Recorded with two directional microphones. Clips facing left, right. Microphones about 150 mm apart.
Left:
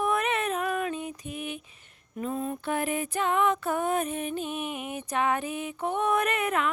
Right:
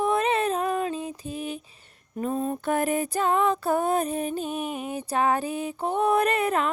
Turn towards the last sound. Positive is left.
turn(degrees=-35)  # may be behind; listen again after turning